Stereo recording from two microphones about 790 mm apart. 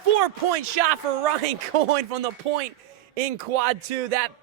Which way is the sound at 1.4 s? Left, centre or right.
Right.